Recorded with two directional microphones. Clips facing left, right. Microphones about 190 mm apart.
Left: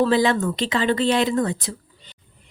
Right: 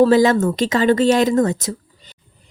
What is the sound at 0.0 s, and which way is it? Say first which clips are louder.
A woman's voice: right 6 dB; 40° right (ahead or behind).